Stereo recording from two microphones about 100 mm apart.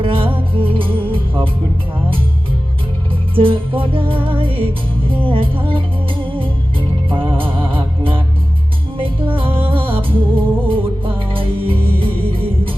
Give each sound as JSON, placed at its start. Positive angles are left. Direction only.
{"t": 0.0, "sound": "music", "side_deg": -65}
{"t": 3.3, "sound": "music", "side_deg": -60}
{"t": 9.3, "sound": "music", "side_deg": -65}